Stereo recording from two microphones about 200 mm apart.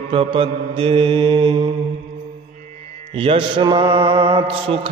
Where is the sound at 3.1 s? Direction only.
25° right (ahead or behind).